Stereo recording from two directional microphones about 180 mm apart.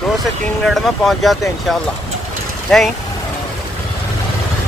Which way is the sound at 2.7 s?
Centre (ahead or behind).